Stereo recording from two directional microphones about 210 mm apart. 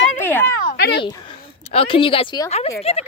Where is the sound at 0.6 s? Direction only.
45° left (ahead or behind).